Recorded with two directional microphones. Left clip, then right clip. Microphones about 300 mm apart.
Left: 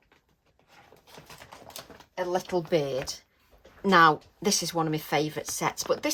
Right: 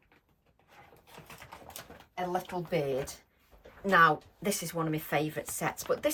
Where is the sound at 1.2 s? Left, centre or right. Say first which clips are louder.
Left 1 dB; left.